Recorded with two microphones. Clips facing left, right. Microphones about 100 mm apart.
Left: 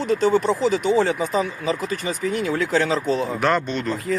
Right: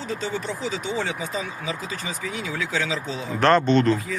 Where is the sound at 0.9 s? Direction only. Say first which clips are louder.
Left 8 dB; 50° left (ahead or behind).